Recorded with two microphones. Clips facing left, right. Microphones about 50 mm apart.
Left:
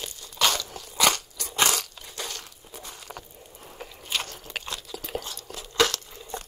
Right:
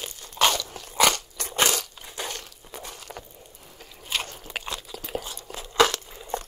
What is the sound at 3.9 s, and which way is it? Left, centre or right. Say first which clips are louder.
Biting: right 6 dB; centre.